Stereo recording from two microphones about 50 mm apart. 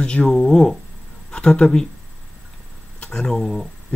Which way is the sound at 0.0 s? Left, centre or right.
Centre.